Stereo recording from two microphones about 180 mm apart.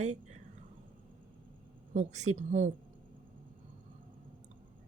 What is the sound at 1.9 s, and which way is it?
Speech, 40° right (ahead or behind).